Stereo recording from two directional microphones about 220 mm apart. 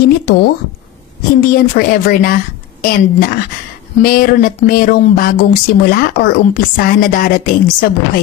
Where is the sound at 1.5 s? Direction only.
40° left (ahead or behind).